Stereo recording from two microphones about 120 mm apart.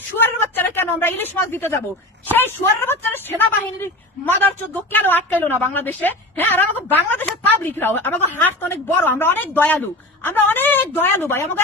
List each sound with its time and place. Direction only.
0.2 s a woman's voice: 20° left (ahead or behind)